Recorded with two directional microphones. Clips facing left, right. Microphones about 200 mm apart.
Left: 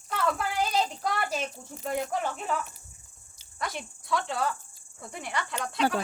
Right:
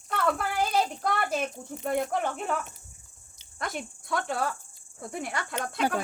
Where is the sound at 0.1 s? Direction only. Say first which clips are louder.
Right 1 dB; 55° right (ahead or behind).